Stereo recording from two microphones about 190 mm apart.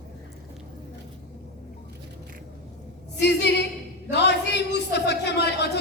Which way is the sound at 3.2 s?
65° left (ahead or behind).